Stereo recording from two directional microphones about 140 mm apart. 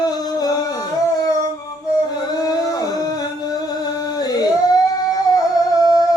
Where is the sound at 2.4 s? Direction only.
25° left (ahead or behind).